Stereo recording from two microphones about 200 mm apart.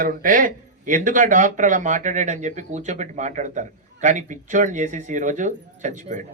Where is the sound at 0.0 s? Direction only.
45° right (ahead or behind).